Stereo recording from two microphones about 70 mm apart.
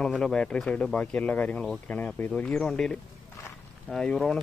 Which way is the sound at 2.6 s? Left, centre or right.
Centre.